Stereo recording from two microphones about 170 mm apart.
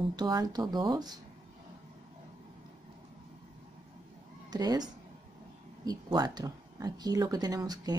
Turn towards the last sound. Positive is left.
turn(degrees=-20)  # may be behind; listen again after turning